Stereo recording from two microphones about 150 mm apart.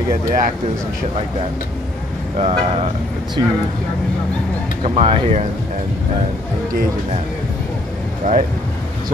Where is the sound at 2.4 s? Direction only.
40° right (ahead or behind).